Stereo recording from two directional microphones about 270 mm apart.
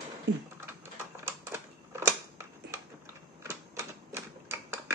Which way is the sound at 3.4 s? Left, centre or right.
Centre.